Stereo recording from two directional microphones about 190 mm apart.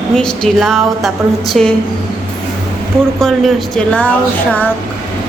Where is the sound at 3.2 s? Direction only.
5° left (ahead or behind).